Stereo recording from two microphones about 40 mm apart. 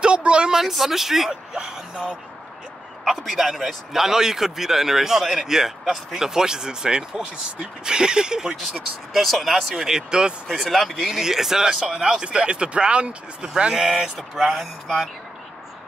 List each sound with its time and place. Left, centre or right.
0.0 s a sound: right
0.5 s a man's voice: centre
1.3 s speech: centre
3.1 s a man's voice: centre
8.5 s speech: centre
9.8 s speech: centre
10.5 s speech: centre
11.1 s a man's voice: centre